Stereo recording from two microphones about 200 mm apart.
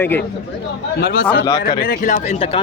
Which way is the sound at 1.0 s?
50° left (ahead or behind).